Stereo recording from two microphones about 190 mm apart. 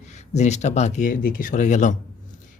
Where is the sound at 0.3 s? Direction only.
35° left (ahead or behind).